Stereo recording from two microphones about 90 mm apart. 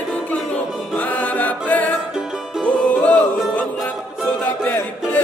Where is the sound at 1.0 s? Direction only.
20° left (ahead or behind).